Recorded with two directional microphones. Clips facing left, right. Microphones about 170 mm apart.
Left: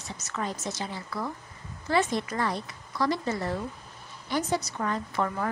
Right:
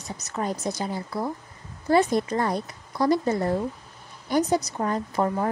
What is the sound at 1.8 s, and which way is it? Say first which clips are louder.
Speech: right 6 dB; 45° right (ahead or behind).